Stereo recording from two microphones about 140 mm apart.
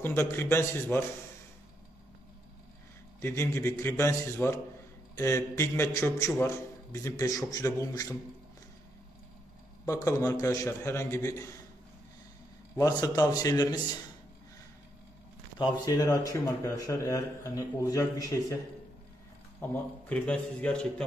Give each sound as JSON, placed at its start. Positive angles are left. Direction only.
{"t": 0.0, "sound": "a man's voice", "side_deg": 15}
{"t": 3.2, "sound": "a man's voice", "side_deg": 20}
{"t": 9.8, "sound": "a man's voice", "side_deg": 20}
{"t": 12.7, "sound": "a man's voice", "side_deg": 25}
{"t": 15.6, "sound": "a man's voice", "side_deg": 25}
{"t": 19.6, "sound": "a man's voice", "side_deg": 10}